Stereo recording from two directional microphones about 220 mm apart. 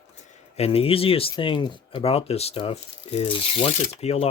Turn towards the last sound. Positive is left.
turn(degrees=30)  # may be behind; listen again after turning